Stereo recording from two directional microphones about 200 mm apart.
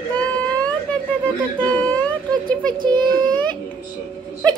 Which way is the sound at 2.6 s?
20° right (ahead or behind).